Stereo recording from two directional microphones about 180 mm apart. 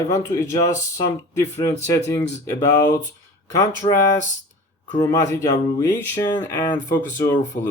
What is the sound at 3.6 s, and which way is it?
Speech, 15° left (ahead or behind).